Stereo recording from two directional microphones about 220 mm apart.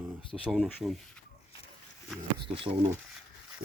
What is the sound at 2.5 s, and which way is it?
Speech, 25° right (ahead or behind).